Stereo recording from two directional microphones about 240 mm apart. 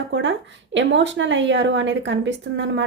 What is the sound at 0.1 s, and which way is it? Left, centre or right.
Speech, right.